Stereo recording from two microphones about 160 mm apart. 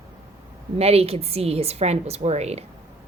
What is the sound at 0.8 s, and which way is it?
A woman's voice, 40° right (ahead or behind).